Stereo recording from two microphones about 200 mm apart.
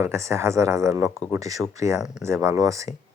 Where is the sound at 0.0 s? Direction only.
15° right (ahead or behind).